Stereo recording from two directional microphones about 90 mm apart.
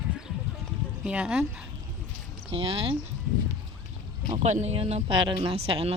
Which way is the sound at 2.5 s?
85° right.